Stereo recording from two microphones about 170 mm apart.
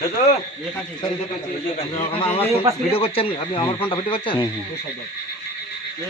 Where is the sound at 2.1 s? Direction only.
35° left (ahead or behind).